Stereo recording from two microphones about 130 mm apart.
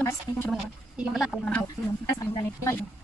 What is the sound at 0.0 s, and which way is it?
Speech, 20° left (ahead or behind).